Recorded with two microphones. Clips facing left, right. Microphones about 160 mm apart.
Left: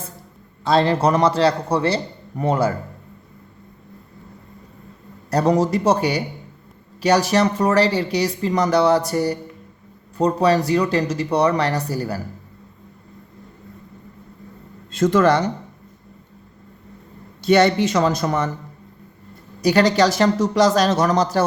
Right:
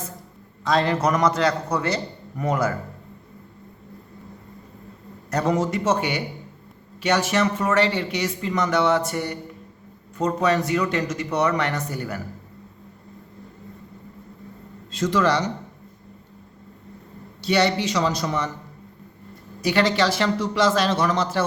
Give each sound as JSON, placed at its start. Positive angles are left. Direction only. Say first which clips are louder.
{"t": 0.6, "sound": "speech", "louder": "left 4 dB", "side_deg": 30}
{"t": 5.3, "sound": "speech", "louder": "left 5 dB", "side_deg": 35}
{"t": 14.9, "sound": "a man's voice", "louder": "left 5 dB", "side_deg": 50}
{"t": 17.4, "sound": "a man's voice", "louder": "left 6 dB", "side_deg": 50}
{"t": 19.6, "sound": "speech", "louder": "left 5 dB", "side_deg": 40}